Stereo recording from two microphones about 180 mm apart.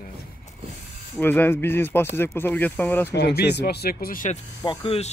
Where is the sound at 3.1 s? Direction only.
65° left (ahead or behind); by 4.3 s 50° left (ahead or behind).